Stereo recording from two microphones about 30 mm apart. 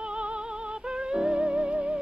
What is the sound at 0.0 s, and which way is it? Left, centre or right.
Music, right.